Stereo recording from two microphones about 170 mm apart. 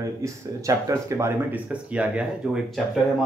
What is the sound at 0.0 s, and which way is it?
Speech, 20° right (ahead or behind).